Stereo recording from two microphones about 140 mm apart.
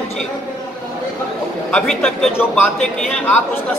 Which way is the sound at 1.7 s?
5° left (ahead or behind).